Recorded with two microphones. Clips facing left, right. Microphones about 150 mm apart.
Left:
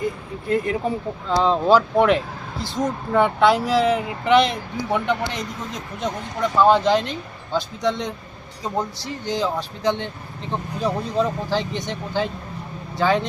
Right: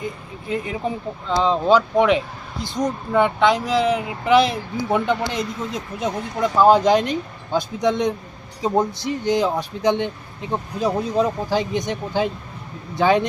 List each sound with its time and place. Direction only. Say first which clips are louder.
0.4 s speech: left 3 dB; centre (ahead or behind); by 13.2 s 15° right (ahead or behind)